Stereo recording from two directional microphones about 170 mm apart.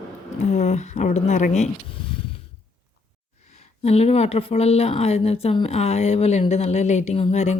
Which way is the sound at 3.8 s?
40° left (ahead or behind).